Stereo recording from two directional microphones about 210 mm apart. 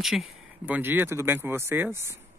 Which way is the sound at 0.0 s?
Centre (ahead or behind).